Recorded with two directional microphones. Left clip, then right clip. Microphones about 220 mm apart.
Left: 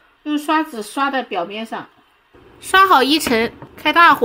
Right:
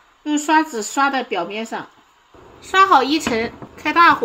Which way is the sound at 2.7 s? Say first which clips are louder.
Left 2 dB; 40° left (ahead or behind).